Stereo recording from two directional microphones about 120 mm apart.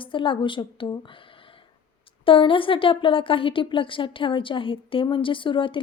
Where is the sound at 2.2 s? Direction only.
45° left (ahead or behind).